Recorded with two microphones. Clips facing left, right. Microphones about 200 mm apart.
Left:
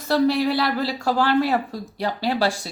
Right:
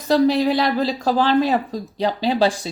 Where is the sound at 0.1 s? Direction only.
20° right (ahead or behind).